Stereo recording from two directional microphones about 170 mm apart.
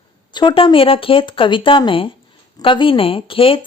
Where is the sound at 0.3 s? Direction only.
30° left (ahead or behind).